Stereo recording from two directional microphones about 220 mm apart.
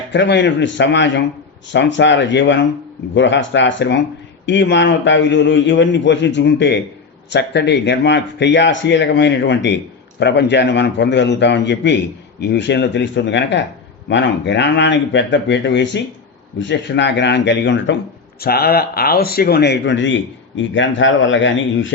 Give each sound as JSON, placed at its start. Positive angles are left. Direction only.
{"t": 0.1, "sound": "speech", "side_deg": 50}